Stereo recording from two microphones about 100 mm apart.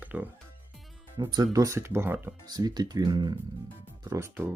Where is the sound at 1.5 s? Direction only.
35° right (ahead or behind).